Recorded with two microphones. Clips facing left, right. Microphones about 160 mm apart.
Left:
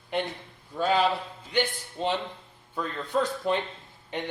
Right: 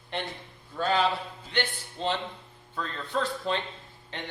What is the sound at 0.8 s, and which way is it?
Speech, 10° left (ahead or behind).